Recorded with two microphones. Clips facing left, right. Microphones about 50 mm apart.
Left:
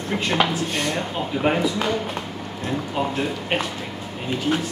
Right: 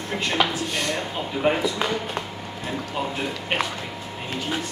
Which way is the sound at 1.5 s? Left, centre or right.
Centre.